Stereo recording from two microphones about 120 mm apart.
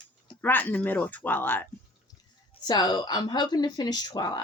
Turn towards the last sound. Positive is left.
turn(degrees=35)  # may be behind; listen again after turning